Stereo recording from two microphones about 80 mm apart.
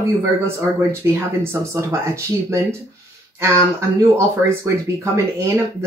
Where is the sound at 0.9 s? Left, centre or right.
Right.